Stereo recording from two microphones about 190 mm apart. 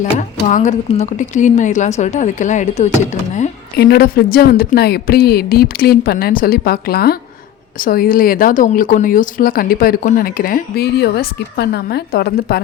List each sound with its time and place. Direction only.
0.0 s speech: 40° left (ahead or behind)
3.8 s speech: 55° left (ahead or behind)